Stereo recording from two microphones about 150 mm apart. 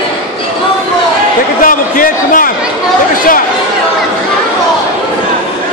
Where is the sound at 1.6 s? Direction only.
70° left (ahead or behind).